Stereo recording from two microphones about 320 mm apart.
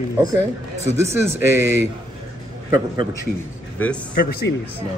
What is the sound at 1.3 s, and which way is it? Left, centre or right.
Speech, centre.